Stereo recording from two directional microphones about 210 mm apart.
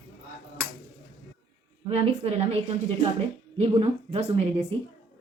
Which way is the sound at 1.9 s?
30° right (ahead or behind).